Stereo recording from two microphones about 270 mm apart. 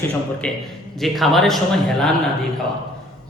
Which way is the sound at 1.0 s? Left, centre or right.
Centre.